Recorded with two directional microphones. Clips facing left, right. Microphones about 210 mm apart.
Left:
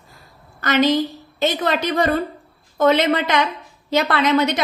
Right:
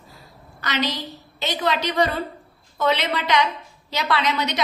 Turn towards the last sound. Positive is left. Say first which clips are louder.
# left 6 dB
turn(degrees=50)  # may be behind; listen again after turning